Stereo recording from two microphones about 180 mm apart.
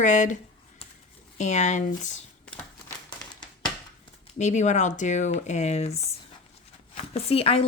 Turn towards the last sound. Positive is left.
turn(degrees=35)  # may be behind; listen again after turning